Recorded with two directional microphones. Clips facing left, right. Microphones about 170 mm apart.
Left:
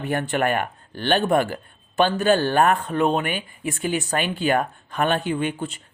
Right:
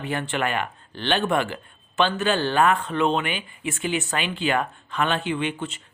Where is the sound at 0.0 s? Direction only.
45° left (ahead or behind).